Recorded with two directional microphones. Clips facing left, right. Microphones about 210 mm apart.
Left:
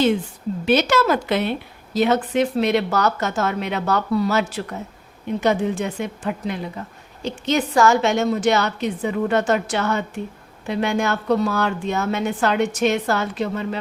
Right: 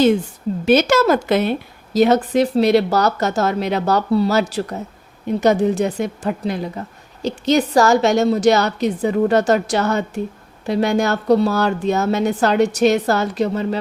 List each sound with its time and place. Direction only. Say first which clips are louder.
0.6 s a woman's voice: right 4 dB; 45° right (ahead or behind)